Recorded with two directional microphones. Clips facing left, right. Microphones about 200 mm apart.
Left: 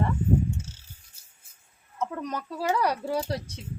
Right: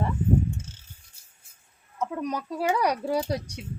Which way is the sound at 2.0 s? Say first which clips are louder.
Right 2 dB; 10° right (ahead or behind).